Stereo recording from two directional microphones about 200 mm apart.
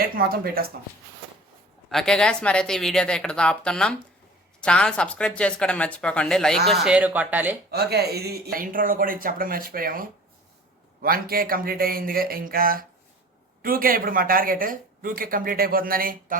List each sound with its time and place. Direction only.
0.0 s speech: 50° right (ahead or behind)
1.9 s speech: 5° left (ahead or behind)
7.7 s speech: 55° right (ahead or behind)